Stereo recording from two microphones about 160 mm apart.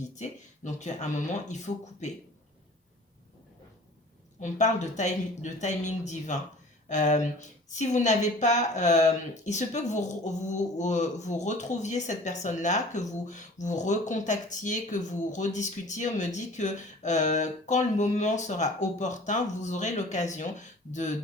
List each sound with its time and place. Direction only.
0.0 s speech: 45° left (ahead or behind)
4.4 s speech: 50° left (ahead or behind)